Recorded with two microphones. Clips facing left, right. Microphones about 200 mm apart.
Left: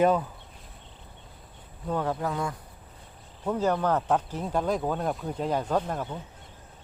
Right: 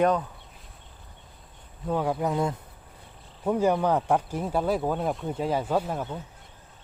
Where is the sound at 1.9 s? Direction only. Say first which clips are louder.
Right 2 dB; 10° right (ahead or behind).